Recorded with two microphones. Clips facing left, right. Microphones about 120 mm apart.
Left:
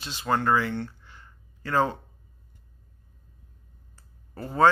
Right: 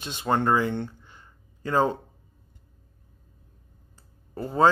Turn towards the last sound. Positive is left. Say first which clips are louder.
# even
turn(degrees=-15)  # may be behind; listen again after turning